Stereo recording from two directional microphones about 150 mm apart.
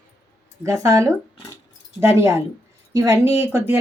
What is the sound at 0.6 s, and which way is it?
Speech, 20° right (ahead or behind).